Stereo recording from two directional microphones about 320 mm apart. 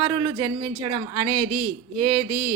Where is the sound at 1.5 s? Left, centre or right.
Right.